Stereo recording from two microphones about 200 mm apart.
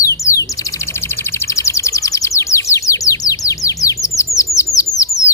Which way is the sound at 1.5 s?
15° left (ahead or behind).